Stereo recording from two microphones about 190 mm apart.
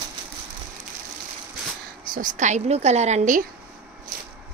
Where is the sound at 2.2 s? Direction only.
40° right (ahead or behind).